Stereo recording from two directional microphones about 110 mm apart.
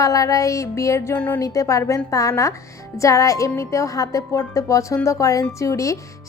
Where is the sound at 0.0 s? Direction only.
30° left (ahead or behind).